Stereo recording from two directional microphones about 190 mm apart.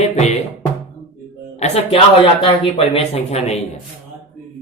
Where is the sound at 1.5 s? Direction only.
35° left (ahead or behind).